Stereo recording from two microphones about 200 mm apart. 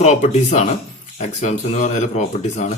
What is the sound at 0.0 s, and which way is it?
Speech, 35° left (ahead or behind).